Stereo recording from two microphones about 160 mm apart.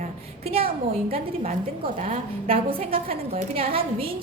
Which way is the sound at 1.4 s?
40° right (ahead or behind).